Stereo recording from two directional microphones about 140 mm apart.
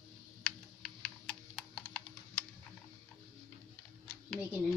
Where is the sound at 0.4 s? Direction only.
5° left (ahead or behind).